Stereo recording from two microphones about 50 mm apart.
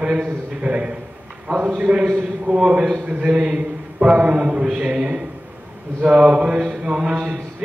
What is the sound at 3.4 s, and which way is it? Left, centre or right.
A man's voice, centre.